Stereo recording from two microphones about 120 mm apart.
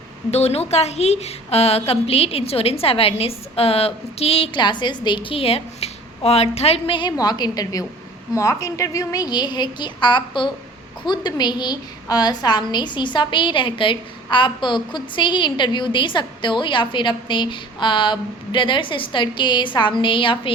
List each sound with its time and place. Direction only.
0.3 s a woman's voice: 60° left (ahead or behind)